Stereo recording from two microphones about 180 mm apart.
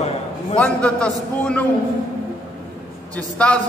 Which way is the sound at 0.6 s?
5° left (ahead or behind).